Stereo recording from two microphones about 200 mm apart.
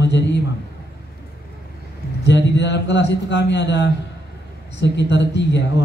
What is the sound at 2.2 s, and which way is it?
A man's voice, 60° left (ahead or behind).